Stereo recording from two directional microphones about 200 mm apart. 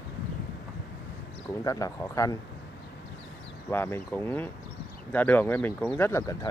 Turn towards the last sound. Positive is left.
turn(degrees=15)  # may be behind; listen again after turning